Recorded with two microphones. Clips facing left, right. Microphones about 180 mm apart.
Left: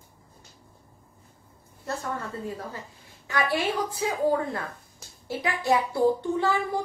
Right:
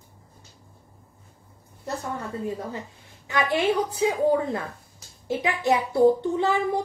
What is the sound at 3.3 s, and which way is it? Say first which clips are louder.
A woman's voice: right 3 dB; 20° right (ahead or behind).